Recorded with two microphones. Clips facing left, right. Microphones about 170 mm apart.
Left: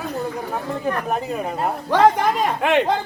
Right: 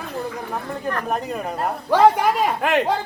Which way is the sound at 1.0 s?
Centre (ahead or behind).